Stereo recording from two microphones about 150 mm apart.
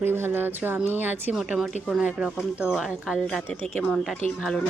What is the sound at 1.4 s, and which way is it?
Speech, 5° right (ahead or behind).